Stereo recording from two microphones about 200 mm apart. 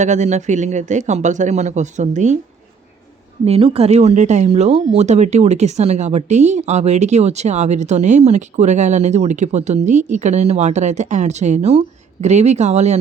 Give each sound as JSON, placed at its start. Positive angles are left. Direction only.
{"t": 0.0, "sound": "speech", "side_deg": -35}
{"t": 3.4, "sound": "speech", "side_deg": -30}